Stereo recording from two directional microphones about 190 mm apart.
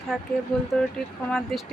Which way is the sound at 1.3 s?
Centre (ahead or behind).